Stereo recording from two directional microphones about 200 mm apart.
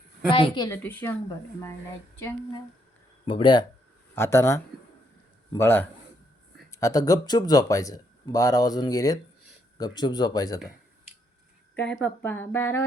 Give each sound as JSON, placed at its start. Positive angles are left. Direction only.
{"t": 0.3, "sound": "speech", "side_deg": 25}
{"t": 2.1, "sound": "speech", "side_deg": 10}
{"t": 3.2, "sound": "speech", "side_deg": 25}
{"t": 4.1, "sound": "a man's voice", "side_deg": 15}
{"t": 11.8, "sound": "speech", "side_deg": 5}